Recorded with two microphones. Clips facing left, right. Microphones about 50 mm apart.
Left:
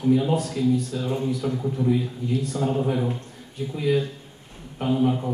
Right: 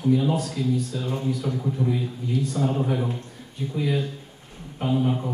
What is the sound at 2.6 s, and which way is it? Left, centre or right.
Speech, centre.